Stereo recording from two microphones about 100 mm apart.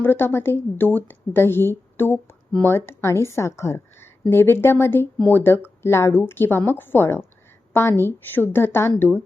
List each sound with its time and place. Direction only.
0.0 s a woman's voice: 20° left (ahead or behind)